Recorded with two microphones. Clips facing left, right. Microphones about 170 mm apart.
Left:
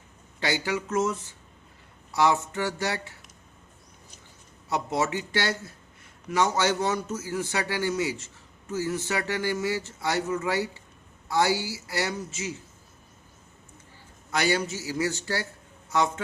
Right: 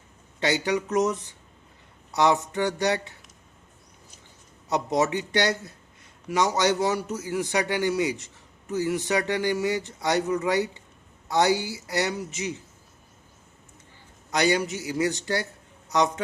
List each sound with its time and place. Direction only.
0.3 s speech: 20° right (ahead or behind)
4.7 s a man's voice: 20° right (ahead or behind)
14.3 s speech: 20° right (ahead or behind)